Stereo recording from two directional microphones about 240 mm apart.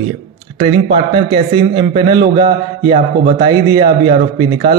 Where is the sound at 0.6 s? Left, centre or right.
Right.